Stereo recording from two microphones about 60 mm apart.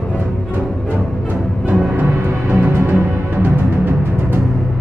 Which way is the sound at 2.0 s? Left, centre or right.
Right.